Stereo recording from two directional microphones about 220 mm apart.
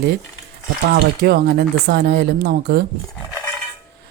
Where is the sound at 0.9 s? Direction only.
45° right (ahead or behind).